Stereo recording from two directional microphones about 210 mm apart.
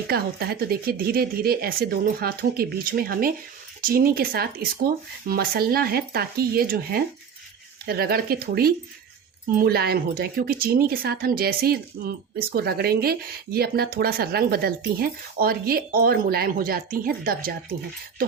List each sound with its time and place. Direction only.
0.1 s speech: 50° right (ahead or behind)